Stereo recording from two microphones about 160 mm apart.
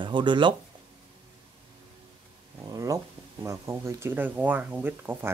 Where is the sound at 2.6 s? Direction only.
20° right (ahead or behind).